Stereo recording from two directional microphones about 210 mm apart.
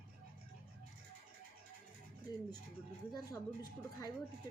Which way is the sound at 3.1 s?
15° left (ahead or behind).